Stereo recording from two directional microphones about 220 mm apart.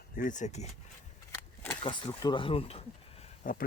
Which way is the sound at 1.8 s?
20° left (ahead or behind).